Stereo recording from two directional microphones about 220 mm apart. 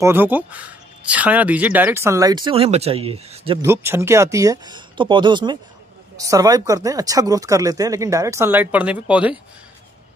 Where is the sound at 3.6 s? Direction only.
10° right (ahead or behind).